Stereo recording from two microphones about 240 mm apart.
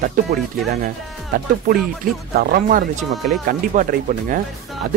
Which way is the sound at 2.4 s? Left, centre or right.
Right.